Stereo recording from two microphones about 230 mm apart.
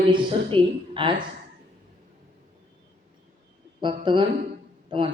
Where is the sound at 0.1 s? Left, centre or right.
Right.